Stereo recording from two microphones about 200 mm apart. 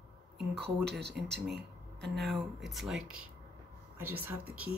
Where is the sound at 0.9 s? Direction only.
55° right (ahead or behind).